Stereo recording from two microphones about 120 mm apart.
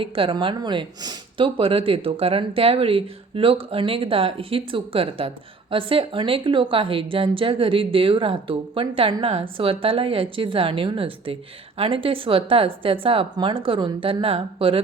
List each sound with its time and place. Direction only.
0.0 s speech: 45° right (ahead or behind)